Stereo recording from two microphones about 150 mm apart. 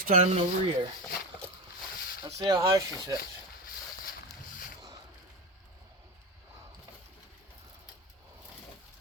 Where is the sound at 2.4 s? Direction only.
30° right (ahead or behind).